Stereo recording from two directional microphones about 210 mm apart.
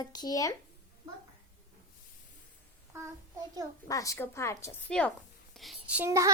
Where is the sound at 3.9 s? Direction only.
15° left (ahead or behind).